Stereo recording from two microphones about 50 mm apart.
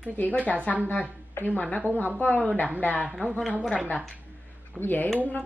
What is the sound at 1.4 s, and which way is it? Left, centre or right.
A woman's voice, left.